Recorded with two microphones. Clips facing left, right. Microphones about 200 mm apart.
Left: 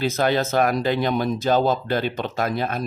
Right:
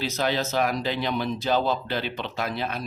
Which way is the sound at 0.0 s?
50° left (ahead or behind).